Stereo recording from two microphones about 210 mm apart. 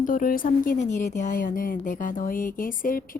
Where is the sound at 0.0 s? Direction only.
40° left (ahead or behind).